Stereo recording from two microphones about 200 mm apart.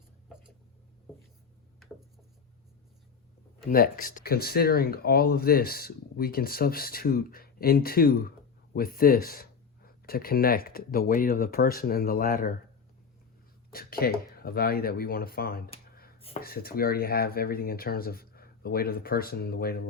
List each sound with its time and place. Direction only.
3.7 s speech: 45° left (ahead or behind)
13.7 s speech: 50° left (ahead or behind)